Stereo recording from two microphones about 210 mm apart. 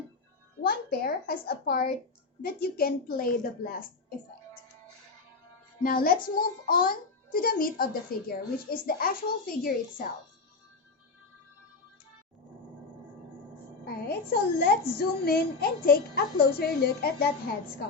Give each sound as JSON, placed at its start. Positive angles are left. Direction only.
{"t": 0.6, "sound": "a child's voice", "side_deg": 45}
{"t": 5.8, "sound": "a child's voice", "side_deg": 45}
{"t": 13.8, "sound": "a child's voice", "side_deg": 45}